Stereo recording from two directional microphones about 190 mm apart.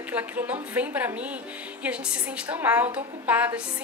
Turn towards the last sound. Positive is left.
turn(degrees=-10)  # may be behind; listen again after turning